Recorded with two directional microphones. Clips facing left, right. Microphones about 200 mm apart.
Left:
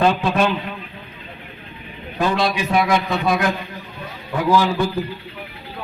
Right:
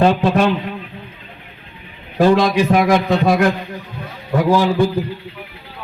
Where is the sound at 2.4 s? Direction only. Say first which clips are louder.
Right 5 dB; 45° right (ahead or behind).